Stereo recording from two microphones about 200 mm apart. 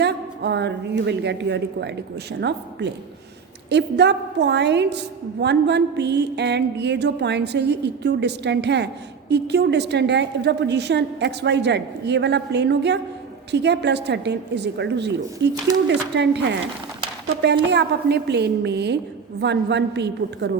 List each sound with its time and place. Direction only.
0.0 s a woman's voice: 60° right (ahead or behind)